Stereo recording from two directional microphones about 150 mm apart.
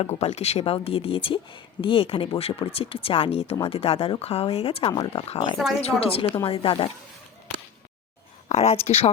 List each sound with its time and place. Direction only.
0.0 s speech: 45° left (ahead or behind)
4.9 s speech: 30° left (ahead or behind)
5.1 s speech: 45° left (ahead or behind)
8.4 s speech: 45° left (ahead or behind)